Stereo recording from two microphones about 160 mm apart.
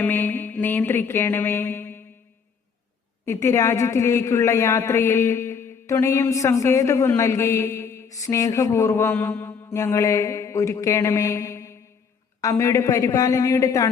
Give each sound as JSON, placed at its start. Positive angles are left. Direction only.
{"t": 0.0, "sound": "a woman's voice", "side_deg": 10}
{"t": 3.2, "sound": "a woman's voice", "side_deg": 15}